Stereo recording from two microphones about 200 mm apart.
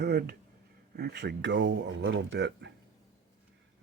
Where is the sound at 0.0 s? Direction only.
55° right (ahead or behind).